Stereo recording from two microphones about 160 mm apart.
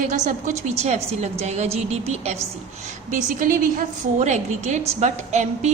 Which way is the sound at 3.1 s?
55° right (ahead or behind).